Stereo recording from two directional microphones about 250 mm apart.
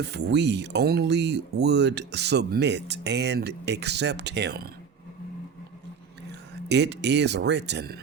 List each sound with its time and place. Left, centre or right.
0.0 s speech: right
6.7 s speech: right